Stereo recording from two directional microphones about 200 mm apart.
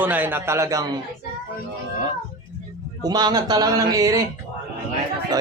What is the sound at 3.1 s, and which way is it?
Speech, 20° right (ahead or behind).